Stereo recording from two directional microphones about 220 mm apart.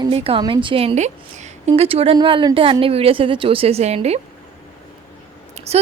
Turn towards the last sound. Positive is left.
turn(degrees=-30)  # may be behind; listen again after turning